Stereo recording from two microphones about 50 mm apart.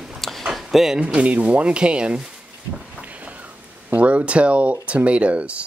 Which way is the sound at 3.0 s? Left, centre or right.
Right.